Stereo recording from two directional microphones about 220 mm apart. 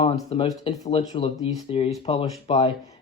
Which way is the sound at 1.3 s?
15° left (ahead or behind).